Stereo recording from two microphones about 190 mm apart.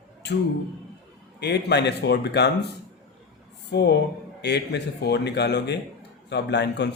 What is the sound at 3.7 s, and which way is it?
Speech, 65° left (ahead or behind).